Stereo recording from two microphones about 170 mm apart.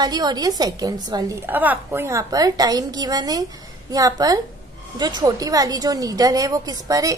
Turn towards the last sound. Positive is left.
turn(degrees=-20)  # may be behind; listen again after turning